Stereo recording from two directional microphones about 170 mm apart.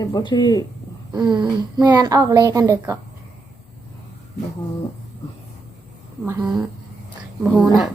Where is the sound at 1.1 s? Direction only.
25° right (ahead or behind).